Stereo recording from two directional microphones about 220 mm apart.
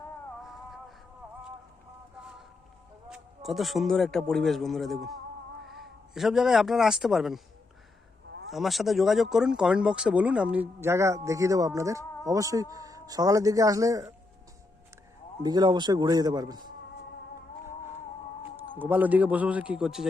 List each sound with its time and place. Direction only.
0.4 s music: centre (ahead or behind)
3.1 s a man's voice: centre (ahead or behind)
8.4 s speech: centre (ahead or behind)
15.4 s speech: 20° right (ahead or behind)
18.8 s speech: 10° right (ahead or behind)